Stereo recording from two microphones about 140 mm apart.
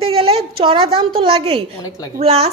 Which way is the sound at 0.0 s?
45° right (ahead or behind).